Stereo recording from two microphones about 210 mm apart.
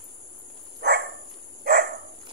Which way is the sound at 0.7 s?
50° right (ahead or behind).